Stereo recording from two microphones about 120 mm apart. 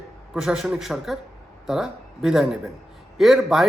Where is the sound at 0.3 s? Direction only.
5° right (ahead or behind).